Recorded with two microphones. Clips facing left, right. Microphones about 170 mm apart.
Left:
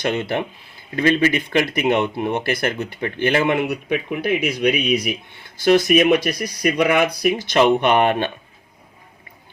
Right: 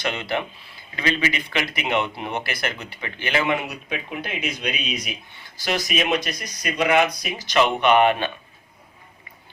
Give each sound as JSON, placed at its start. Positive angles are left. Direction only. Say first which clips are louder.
{"t": 0.0, "sound": "speech", "louder": "left 4 dB", "side_deg": 50}